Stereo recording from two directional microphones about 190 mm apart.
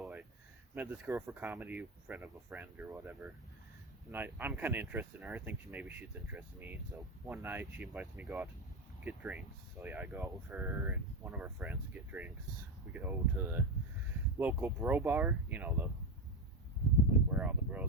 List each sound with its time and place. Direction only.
0.0 s a sound: 5° right (ahead or behind)
0.8 s speech: 10° right (ahead or behind)
17.3 s speech: 5° right (ahead or behind)